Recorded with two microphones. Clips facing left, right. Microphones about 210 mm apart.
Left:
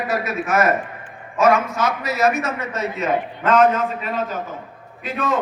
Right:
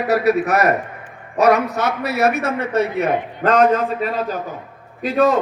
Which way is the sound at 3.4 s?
30° right (ahead or behind).